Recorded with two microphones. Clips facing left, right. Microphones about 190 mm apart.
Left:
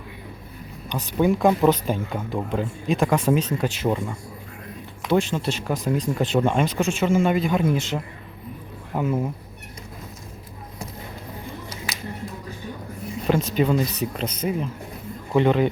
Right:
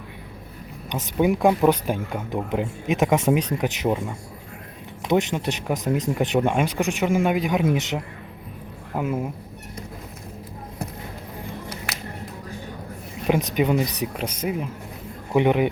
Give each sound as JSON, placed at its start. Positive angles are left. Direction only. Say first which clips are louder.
{"t": 0.9, "sound": "speech", "louder": "even", "side_deg": -20}
{"t": 11.9, "sound": "music", "louder": "right 1 dB", "side_deg": -65}
{"t": 13.2, "sound": "speech", "louder": "even", "side_deg": -15}